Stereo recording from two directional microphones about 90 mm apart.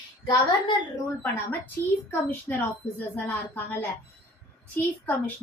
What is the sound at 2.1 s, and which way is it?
A woman's voice, 25° left (ahead or behind).